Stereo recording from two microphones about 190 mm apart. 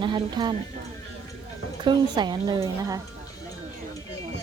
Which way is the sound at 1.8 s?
25° right (ahead or behind).